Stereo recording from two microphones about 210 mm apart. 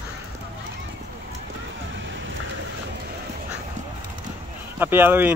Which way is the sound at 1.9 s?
60° right (ahead or behind).